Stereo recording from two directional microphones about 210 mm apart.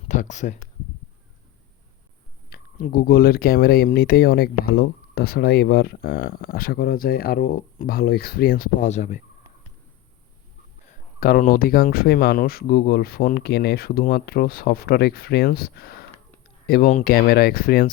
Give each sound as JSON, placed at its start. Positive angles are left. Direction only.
{"t": 0.1, "sound": "speech", "side_deg": 35}
{"t": 2.5, "sound": "speech", "side_deg": 45}
{"t": 11.2, "sound": "speech", "side_deg": 40}